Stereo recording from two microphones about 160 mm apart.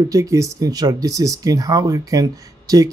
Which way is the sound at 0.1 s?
20° right (ahead or behind).